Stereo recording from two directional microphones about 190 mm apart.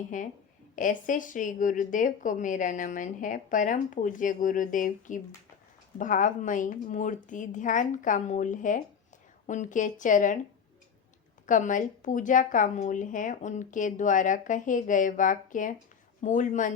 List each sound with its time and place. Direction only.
0.1 s a woman's voice: 45° left (ahead or behind)
11.4 s a woman's voice: 40° left (ahead or behind)